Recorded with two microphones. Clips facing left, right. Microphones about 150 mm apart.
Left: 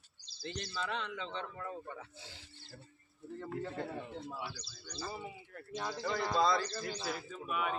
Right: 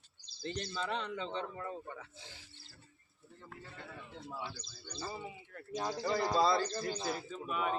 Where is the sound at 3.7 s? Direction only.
35° left (ahead or behind).